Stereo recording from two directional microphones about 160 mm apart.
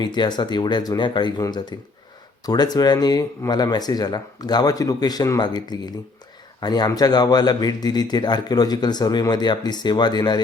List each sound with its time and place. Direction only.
0.0 s a man's voice: 25° left (ahead or behind)